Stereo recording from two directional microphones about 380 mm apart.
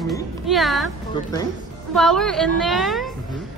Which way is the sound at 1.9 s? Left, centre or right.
Centre.